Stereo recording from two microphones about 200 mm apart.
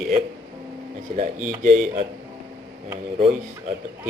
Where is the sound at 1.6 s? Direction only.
40° right (ahead or behind).